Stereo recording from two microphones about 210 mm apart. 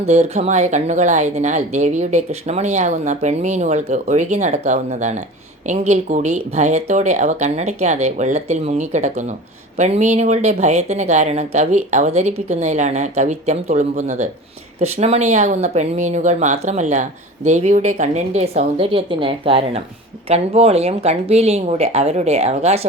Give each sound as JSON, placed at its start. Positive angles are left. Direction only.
{"t": 0.0, "sound": "speech", "side_deg": -30}